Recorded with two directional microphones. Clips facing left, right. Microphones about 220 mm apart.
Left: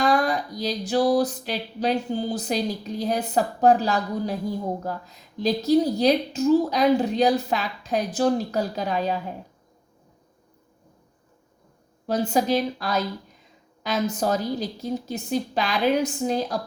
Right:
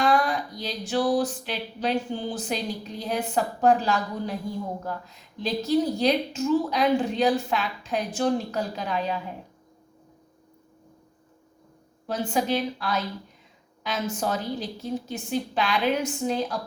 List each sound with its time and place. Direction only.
0.0 s a sound: 40° left (ahead or behind)
3.0 s a woman's voice: 40° left (ahead or behind)
12.0 s a woman's voice: 40° left (ahead or behind)